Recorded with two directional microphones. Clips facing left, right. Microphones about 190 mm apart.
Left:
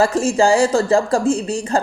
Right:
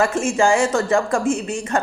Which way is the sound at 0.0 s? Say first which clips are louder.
Left 3 dB; 35° left (ahead or behind).